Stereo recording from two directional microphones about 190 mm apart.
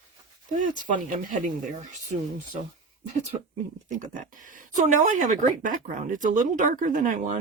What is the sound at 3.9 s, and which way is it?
Speech, 45° right (ahead or behind).